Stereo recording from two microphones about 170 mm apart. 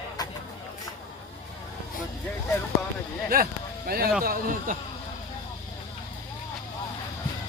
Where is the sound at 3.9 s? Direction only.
65° right (ahead or behind).